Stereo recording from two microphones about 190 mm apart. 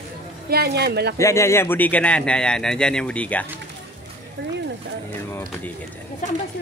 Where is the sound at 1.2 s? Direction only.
15° left (ahead or behind).